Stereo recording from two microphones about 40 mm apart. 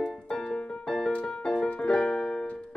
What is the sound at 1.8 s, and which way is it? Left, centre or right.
Keyboard, left.